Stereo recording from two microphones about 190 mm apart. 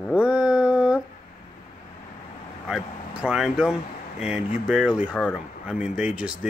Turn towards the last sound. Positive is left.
turn(degrees=-5)  # may be behind; listen again after turning